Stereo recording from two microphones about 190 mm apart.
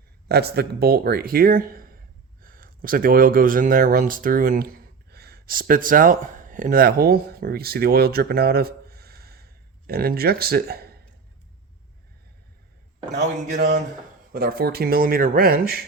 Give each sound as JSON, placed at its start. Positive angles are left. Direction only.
{"t": 0.3, "sound": "speech", "side_deg": -55}
{"t": 13.1, "sound": "speech", "side_deg": -60}